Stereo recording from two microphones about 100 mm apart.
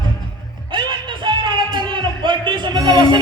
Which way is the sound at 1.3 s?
50° right (ahead or behind).